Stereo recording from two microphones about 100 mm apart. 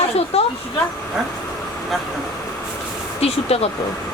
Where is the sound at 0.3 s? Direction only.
90° left.